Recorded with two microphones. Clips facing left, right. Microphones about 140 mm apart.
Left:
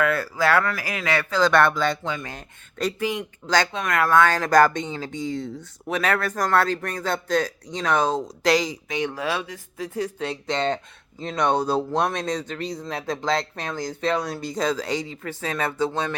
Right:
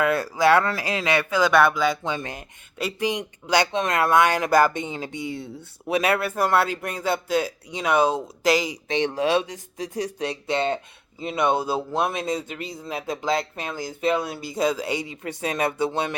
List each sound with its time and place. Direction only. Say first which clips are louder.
0.0 s a man's voice: right 2 dB; 20° right (ahead or behind)
2.0 s a man's voice: right 1 dB; 20° right (ahead or behind)
8.9 s a man's voice: right 6 dB; 25° right (ahead or behind)